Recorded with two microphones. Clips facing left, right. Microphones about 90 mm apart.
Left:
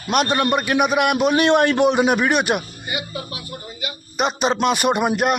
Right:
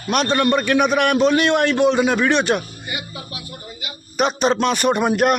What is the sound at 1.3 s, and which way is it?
A man's voice, 20° left (ahead or behind).